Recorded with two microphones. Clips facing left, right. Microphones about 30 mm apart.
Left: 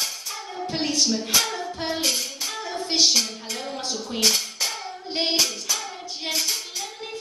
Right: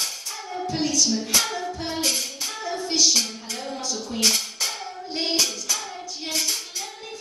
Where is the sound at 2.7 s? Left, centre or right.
Left.